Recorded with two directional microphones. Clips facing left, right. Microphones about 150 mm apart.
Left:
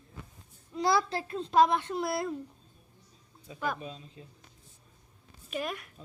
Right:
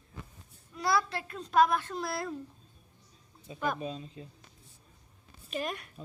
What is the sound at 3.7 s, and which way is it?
Speech, 35° right (ahead or behind).